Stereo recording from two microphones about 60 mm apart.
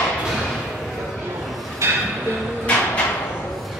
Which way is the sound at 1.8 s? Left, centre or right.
Right.